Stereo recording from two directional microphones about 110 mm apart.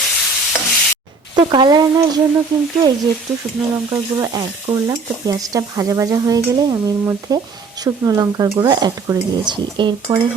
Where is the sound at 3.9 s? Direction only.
35° right (ahead or behind).